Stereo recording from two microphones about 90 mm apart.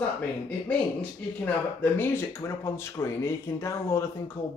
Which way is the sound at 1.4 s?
25° left (ahead or behind).